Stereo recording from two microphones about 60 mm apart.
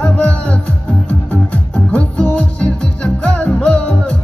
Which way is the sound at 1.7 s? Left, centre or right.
Left.